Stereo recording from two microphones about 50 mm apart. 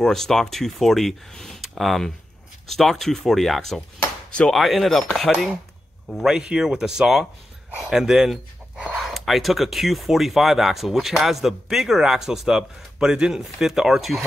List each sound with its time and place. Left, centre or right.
0.0 s speech: centre
6.2 s speech: centre
8.7 s a sound: right
9.0 s speech: centre